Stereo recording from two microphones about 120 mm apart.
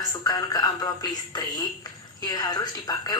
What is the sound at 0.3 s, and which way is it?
A woman's voice, 30° left (ahead or behind).